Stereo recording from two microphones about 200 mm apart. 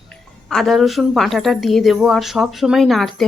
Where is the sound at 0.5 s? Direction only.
Centre (ahead or behind).